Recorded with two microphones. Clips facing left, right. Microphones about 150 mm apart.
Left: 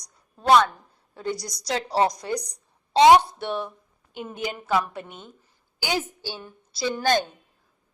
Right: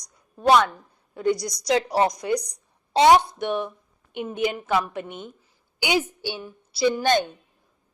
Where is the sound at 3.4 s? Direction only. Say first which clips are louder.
Right 3 dB; 15° right (ahead or behind).